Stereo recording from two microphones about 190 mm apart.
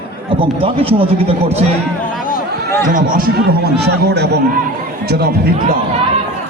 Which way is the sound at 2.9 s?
50° right (ahead or behind).